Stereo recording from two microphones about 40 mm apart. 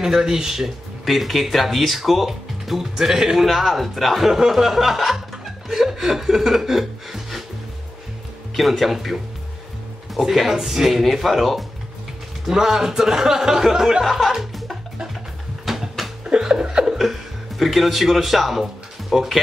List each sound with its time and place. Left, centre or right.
0.0 s speech: centre
1.0 s speech: centre
8.5 s speech: centre
10.3 s speech: centre
12.4 s speech: centre
15.6 s music: centre
16.3 s speech: centre
17.0 s speech: centre